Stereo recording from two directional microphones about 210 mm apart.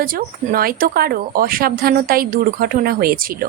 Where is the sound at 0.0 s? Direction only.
45° right (ahead or behind).